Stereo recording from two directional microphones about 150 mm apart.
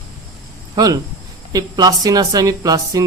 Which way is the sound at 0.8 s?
25° right (ahead or behind).